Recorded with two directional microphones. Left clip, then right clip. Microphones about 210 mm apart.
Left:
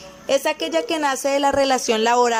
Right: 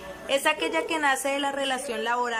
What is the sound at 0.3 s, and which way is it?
A woman's voice, 20° left (ahead or behind).